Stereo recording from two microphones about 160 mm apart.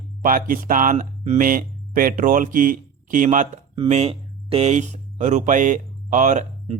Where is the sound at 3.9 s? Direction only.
40° right (ahead or behind).